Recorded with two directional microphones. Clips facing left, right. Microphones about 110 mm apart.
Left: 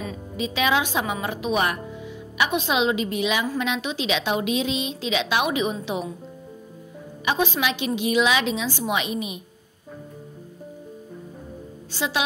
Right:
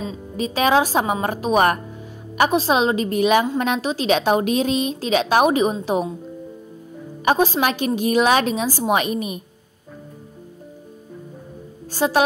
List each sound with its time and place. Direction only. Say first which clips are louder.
0.4 s a woman's voice: right 5 dB; 40° right (ahead or behind)
7.2 s a woman's voice: right 5 dB; 40° right (ahead or behind)
11.9 s a woman's voice: right 8 dB; 45° right (ahead or behind)